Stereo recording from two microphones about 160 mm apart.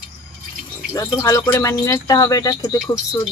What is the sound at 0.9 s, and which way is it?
Speech, 20° left (ahead or behind).